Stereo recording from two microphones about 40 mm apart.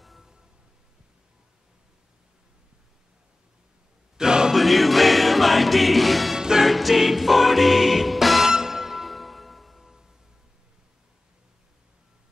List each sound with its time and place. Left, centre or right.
4.2 s music: centre
4.6 s music: centre
6.3 s music: centre
6.7 s music: centre
8.5 s music: centre
9.1 s music: centre